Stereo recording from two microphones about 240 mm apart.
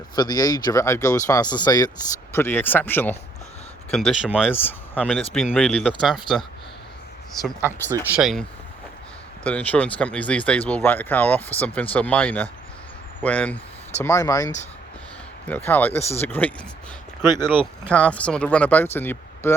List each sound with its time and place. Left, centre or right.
0.2 s speech: centre
4.5 s speech: centre
7.4 s speech: centre
8.1 s speech: centre
17.2 s speech: centre
17.8 s speech: centre